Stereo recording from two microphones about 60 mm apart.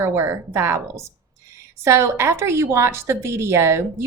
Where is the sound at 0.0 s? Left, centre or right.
Right.